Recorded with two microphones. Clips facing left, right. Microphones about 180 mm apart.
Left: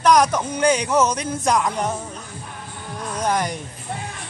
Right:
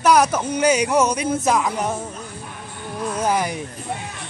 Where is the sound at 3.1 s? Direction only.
5° right (ahead or behind).